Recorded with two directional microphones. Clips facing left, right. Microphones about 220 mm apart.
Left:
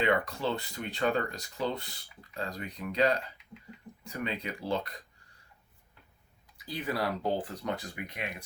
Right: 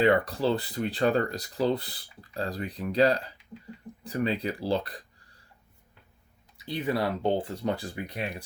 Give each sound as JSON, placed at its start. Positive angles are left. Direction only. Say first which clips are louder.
{"t": 0.0, "sound": "speech", "louder": "right 6 dB", "side_deg": -35}
{"t": 6.7, "sound": "speech", "louder": "right 4 dB", "side_deg": -25}